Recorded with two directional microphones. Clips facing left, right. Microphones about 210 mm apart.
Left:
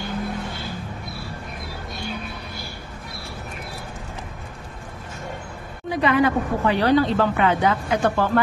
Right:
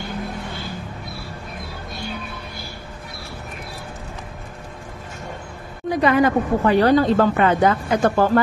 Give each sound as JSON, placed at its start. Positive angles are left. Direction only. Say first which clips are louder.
{"t": 5.9, "sound": "a woman's voice", "louder": "right 2 dB", "side_deg": -40}